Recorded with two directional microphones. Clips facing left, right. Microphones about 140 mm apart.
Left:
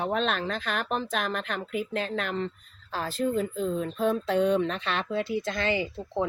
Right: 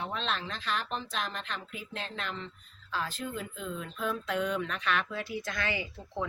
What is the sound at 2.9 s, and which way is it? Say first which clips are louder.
Speech: left 8 dB; 40° left (ahead or behind).